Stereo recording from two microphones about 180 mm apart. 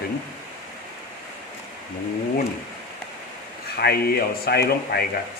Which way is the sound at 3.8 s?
60° left (ahead or behind).